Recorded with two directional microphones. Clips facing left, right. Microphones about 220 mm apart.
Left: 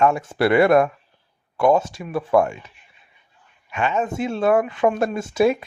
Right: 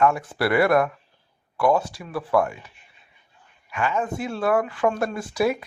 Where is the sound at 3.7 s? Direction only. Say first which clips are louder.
Left 3 dB; 25° left (ahead or behind).